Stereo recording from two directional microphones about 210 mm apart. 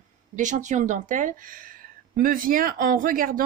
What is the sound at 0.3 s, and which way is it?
Speech, 35° right (ahead or behind).